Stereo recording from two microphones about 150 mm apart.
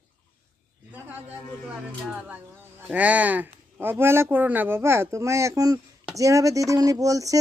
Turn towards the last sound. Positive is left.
turn(degrees=-20)  # may be behind; listen again after turning